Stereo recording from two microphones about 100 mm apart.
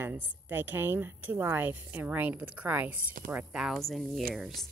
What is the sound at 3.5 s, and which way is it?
Speech, centre (ahead or behind).